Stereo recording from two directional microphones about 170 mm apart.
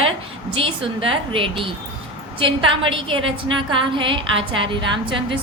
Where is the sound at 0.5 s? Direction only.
30° right (ahead or behind).